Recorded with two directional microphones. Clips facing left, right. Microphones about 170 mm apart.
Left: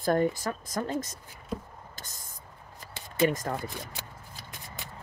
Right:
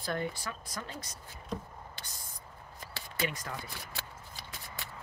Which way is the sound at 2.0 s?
45° left (ahead or behind).